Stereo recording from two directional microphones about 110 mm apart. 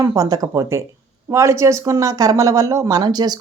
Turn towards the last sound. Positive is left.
turn(degrees=-40)  # may be behind; listen again after turning